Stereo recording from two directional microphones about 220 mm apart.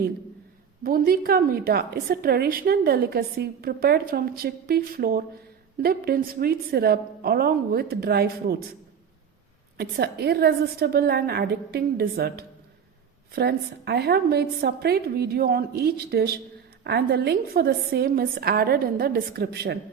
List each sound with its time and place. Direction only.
0.9 s a woman's voice: 40° right (ahead or behind)
9.7 s a woman's voice: 45° right (ahead or behind)